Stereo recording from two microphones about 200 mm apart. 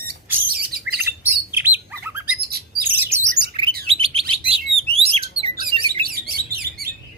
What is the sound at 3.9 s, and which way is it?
Chirp, 30° right (ahead or behind).